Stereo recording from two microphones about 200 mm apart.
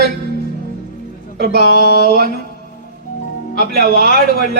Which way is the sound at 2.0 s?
50° right (ahead or behind).